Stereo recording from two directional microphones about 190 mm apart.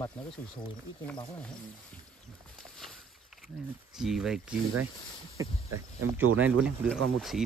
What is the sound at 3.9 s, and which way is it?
Speech, centre (ahead or behind).